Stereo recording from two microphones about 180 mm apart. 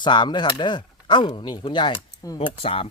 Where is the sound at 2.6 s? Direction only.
30° left (ahead or behind).